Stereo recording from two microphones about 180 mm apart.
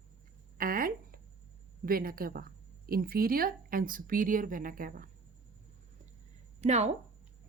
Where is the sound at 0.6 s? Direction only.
55° right (ahead or behind).